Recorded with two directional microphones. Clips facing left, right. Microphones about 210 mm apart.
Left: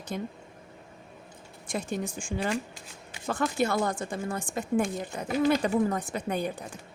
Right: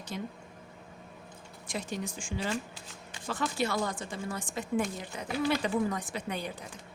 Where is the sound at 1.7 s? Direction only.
50° left (ahead or behind).